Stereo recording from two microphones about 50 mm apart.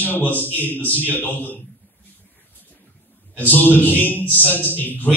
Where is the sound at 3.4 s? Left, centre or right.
Left.